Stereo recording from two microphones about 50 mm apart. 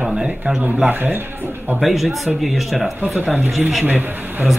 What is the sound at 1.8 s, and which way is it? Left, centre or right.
Speech, centre.